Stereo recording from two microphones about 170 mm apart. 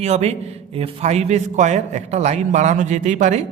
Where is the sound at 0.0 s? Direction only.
40° right (ahead or behind).